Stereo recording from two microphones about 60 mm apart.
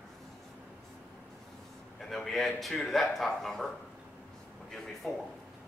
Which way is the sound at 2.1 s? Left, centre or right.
Centre.